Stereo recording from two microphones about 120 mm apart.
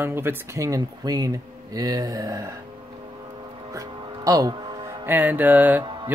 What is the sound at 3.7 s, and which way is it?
Music, 30° right (ahead or behind).